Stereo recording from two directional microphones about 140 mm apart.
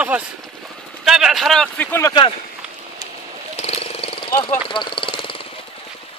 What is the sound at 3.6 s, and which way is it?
Vehicle, 45° left (ahead or behind).